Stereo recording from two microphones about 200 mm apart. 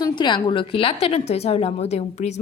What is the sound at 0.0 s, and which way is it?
A woman's voice, 20° left (ahead or behind).